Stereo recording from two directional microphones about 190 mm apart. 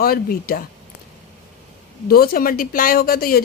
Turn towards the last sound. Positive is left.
turn(degrees=50)  # may be behind; listen again after turning